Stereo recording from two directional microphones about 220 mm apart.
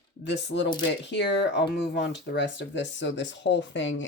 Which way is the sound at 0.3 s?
50° left (ahead or behind).